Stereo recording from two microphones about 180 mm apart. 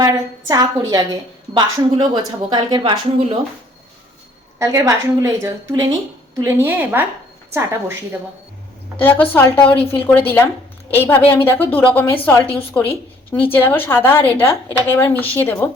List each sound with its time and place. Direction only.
0.0 s a woman's voice: 20° right (ahead or behind)
4.6 s a woman's voice: 15° right (ahead or behind)
9.0 s a woman's voice: 10° left (ahead or behind)